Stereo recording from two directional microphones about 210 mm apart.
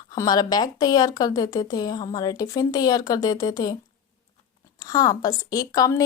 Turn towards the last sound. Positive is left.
turn(degrees=15)  # may be behind; listen again after turning